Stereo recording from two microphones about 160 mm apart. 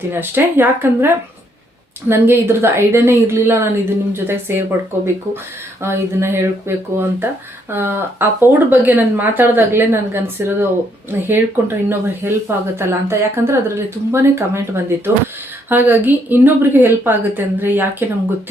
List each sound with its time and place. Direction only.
0.1 s speech: 15° right (ahead or behind)
5.8 s speech: 15° right (ahead or behind)